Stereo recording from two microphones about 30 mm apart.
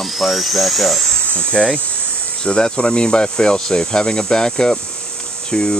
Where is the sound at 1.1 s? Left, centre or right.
Left.